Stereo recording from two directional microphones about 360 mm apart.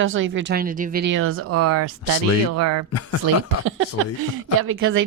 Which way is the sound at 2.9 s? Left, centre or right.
Left.